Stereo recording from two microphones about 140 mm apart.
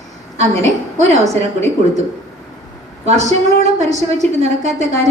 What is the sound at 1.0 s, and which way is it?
Speech, 55° right (ahead or behind).